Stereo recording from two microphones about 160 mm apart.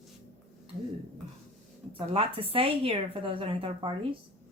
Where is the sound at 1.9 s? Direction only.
35° right (ahead or behind).